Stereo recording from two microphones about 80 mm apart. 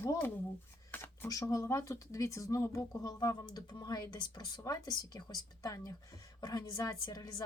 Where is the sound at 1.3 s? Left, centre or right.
Left.